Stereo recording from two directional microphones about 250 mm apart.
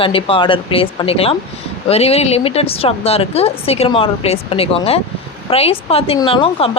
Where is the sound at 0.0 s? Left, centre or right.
Left.